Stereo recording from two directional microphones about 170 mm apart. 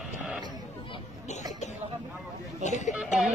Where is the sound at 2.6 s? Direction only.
45° left (ahead or behind).